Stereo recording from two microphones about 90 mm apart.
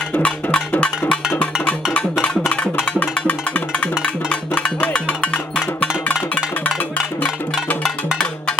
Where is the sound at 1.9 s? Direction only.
15° left (ahead or behind).